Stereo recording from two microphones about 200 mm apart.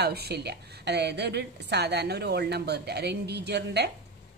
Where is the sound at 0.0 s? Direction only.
55° right (ahead or behind).